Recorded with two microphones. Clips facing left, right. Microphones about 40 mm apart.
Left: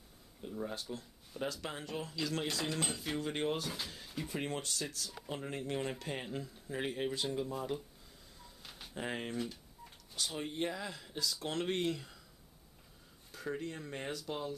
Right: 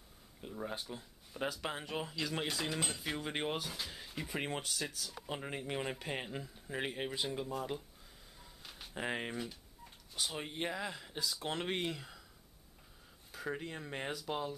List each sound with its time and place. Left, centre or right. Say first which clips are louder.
0.4 s speech: left 1 dB; centre
3.6 s speech: left 1 dB; centre
3.9 s speech: even; centre
8.6 s a sound: even; centre
8.9 s speech: even; centre
13.5 s speech: left 1 dB; centre